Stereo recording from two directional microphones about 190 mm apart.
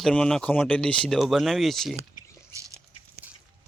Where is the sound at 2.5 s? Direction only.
15° right (ahead or behind).